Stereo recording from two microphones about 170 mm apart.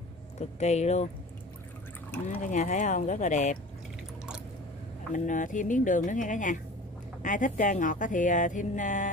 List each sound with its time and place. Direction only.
0.4 s speech: 40° left (ahead or behind)
2.5 s speech: 45° left (ahead or behind)
5.1 s speech: 50° left (ahead or behind)